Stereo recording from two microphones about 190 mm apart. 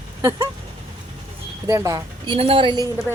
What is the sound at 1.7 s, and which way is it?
Speech, 15° right (ahead or behind).